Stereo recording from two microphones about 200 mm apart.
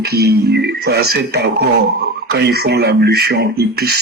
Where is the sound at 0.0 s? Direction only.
55° right (ahead or behind).